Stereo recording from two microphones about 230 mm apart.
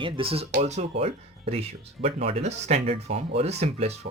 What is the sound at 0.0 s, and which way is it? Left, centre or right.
Speech, right.